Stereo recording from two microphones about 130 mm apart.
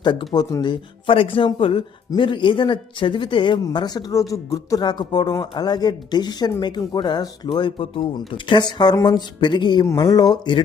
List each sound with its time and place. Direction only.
0.0 s speech: 35° left (ahead or behind)